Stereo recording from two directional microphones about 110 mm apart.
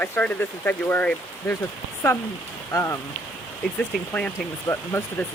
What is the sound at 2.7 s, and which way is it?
Speech, 25° left (ahead or behind).